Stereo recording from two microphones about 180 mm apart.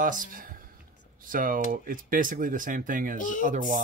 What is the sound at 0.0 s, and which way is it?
Speech, 50° right (ahead or behind).